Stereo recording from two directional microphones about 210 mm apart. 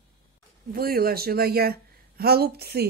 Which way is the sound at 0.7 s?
45° right (ahead or behind).